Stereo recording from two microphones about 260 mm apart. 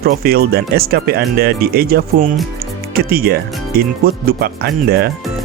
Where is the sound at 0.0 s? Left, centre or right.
Right.